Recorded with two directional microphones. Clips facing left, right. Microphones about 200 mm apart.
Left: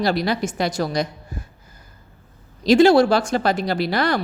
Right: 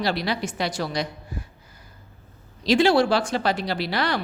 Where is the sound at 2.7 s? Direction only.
45° left (ahead or behind).